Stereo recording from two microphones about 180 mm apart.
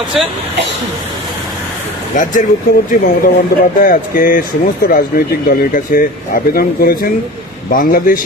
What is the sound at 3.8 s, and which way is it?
Speech, 50° left (ahead or behind).